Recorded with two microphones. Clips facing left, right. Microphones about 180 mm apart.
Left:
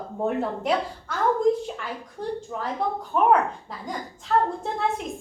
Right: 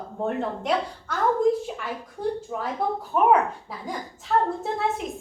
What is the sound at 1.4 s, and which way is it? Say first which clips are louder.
Speech: left 1 dB; 5° right (ahead or behind).